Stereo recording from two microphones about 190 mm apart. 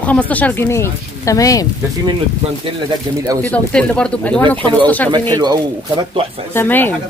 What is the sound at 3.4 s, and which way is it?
Speech, 5° left (ahead or behind).